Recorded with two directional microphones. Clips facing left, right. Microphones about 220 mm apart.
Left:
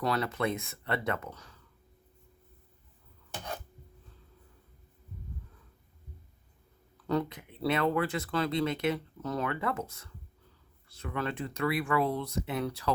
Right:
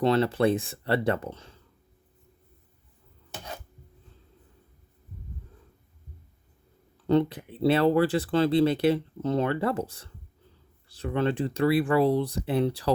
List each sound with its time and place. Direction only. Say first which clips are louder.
0.0 s speech: right 8 dB; 30° right (ahead or behind)
6.9 s speech: right 8 dB; 25° right (ahead or behind)